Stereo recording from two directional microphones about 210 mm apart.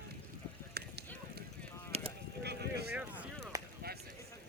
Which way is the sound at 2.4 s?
50° right (ahead or behind).